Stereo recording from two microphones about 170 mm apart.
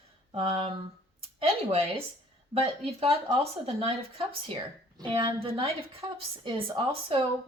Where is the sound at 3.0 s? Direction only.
30° right (ahead or behind).